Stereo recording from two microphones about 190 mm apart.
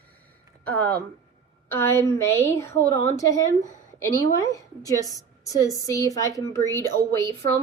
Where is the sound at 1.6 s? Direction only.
15° left (ahead or behind).